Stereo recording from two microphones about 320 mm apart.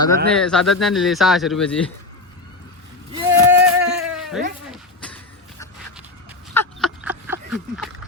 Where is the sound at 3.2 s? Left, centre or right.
Centre.